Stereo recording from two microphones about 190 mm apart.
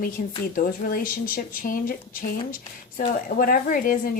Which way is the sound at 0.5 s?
50° left (ahead or behind).